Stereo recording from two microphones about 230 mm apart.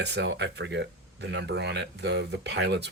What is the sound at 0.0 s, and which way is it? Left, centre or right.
Speech, right.